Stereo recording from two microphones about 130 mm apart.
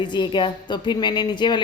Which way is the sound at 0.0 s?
35° left (ahead or behind).